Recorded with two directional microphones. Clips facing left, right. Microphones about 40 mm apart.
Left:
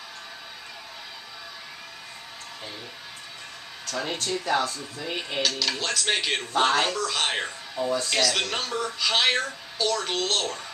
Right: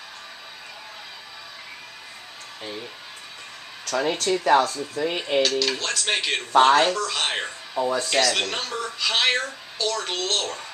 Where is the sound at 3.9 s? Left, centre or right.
Right.